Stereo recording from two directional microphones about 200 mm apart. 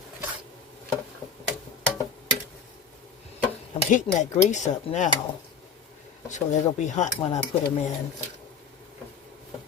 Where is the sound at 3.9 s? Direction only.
35° left (ahead or behind).